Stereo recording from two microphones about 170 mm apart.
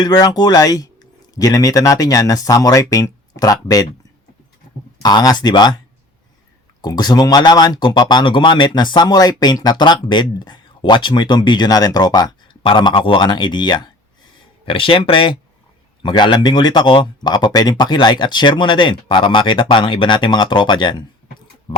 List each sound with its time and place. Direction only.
0.0 s speech: 20° left (ahead or behind)
5.0 s speech: 25° left (ahead or behind)
6.8 s speech: 25° left (ahead or behind)
21.7 s tick-tock: 30° left (ahead or behind)